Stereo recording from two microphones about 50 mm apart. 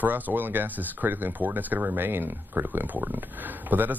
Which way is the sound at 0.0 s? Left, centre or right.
Right.